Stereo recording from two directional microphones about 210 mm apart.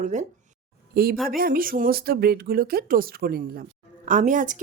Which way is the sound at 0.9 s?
45° right (ahead or behind).